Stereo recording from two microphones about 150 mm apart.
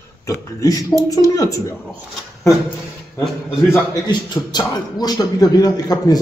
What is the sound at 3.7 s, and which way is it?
A man's voice, 25° left (ahead or behind).